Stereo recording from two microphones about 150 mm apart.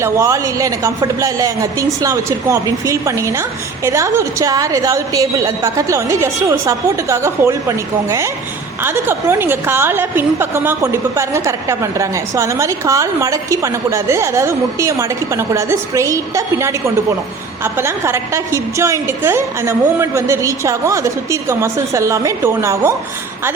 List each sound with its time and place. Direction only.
0.0 s a woman's voice: 20° right (ahead or behind)
8.8 s a woman's voice: 15° right (ahead or behind)